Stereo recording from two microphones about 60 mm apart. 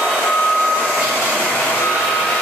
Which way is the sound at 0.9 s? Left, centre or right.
Centre.